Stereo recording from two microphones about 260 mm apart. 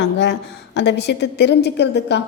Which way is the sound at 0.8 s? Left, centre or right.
Left.